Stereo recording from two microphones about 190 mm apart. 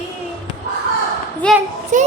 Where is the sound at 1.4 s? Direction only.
5° left (ahead or behind).